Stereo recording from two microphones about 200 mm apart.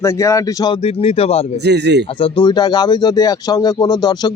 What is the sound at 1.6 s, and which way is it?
Speech, 60° right (ahead or behind).